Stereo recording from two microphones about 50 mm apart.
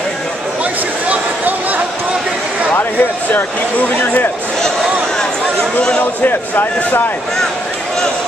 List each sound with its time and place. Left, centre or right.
1.0 s a sound: right
2.8 s speech: left
3.9 s speech: left
5.9 s speech: left